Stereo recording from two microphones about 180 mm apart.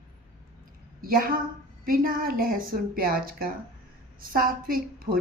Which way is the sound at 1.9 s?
55° right (ahead or behind).